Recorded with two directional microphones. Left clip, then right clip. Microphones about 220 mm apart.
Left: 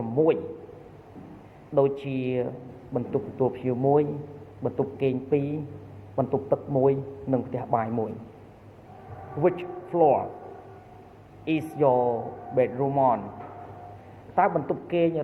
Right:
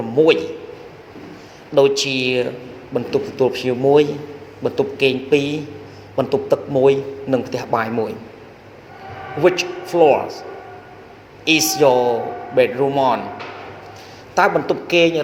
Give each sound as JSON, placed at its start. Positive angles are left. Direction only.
{"t": 1.7, "sound": "a man's voice", "side_deg": -40}
{"t": 9.4, "sound": "a man's voice", "side_deg": -40}
{"t": 11.4, "sound": "a man's voice", "side_deg": -40}
{"t": 14.3, "sound": "a man's voice", "side_deg": -40}